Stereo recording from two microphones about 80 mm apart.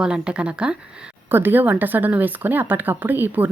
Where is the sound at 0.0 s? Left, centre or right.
Centre.